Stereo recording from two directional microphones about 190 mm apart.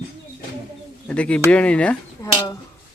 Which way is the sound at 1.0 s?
5° left (ahead or behind).